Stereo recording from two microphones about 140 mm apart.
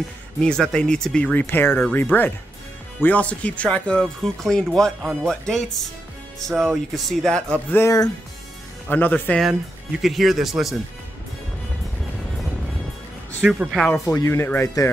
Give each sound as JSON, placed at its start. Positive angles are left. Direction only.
{"t": 0.4, "sound": "speech", "side_deg": 5}
{"t": 10.0, "sound": "speech", "side_deg": 0}
{"t": 13.5, "sound": "speech", "side_deg": -5}
{"t": 14.1, "sound": "speech", "side_deg": 20}